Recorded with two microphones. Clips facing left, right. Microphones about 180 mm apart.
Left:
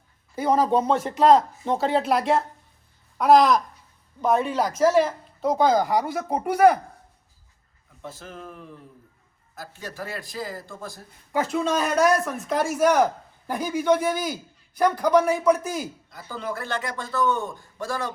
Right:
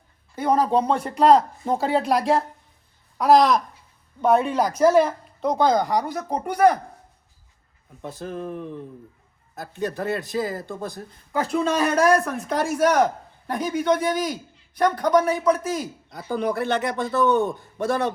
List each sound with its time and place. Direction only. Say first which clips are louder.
0.3 s speech: right 1 dB; 5° left (ahead or behind)
8.0 s a man's voice: right 7 dB; 15° right (ahead or behind)
9.8 s a man's voice: right 9 dB; 20° right (ahead or behind)
11.3 s speech: right 1 dB; centre (ahead or behind)
16.6 s a man's voice: right 6 dB; 20° right (ahead or behind)